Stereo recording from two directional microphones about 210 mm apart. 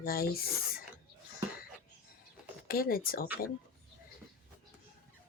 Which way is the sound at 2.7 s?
45° left (ahead or behind).